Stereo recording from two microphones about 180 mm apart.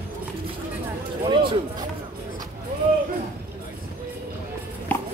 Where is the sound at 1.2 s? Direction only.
25° right (ahead or behind).